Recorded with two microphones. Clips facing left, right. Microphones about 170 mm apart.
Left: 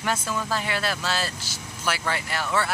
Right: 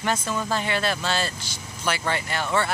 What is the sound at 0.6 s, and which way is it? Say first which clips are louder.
Speech: right 2 dB; 5° left (ahead or behind).